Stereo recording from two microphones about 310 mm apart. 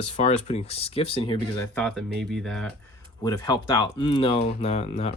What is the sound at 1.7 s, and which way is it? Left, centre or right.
Speech, centre.